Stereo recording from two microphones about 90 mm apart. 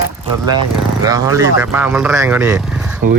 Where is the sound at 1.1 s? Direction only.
35° right (ahead or behind).